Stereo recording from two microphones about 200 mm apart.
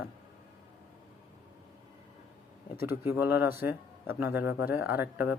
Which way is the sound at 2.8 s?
10° right (ahead or behind).